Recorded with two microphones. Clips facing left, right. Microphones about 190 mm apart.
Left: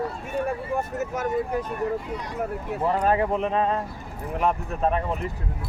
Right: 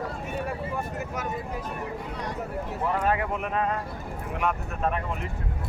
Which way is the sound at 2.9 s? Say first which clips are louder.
Left 5 dB; 35° left (ahead or behind).